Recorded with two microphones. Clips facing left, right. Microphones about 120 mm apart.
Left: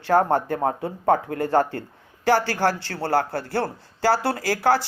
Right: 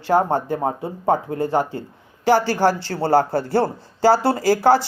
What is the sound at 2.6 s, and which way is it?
Speech, 30° right (ahead or behind).